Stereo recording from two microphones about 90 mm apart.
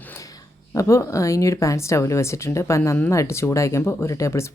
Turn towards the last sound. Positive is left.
turn(degrees=35)  # may be behind; listen again after turning